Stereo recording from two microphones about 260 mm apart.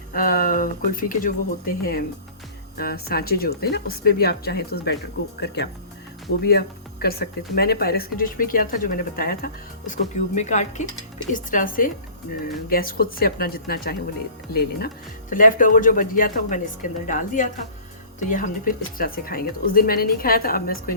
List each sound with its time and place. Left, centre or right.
0.1 s speech: left
6.4 s speech: left